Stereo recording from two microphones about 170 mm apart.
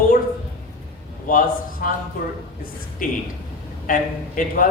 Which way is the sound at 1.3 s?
55° left (ahead or behind).